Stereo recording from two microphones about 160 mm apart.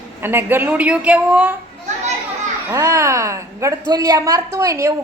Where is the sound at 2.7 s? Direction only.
20° right (ahead or behind).